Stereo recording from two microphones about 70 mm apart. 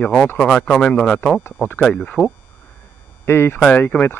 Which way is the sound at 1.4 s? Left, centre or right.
Left.